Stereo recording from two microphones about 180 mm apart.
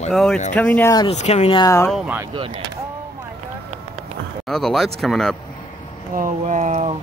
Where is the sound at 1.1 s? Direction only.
35° left (ahead or behind).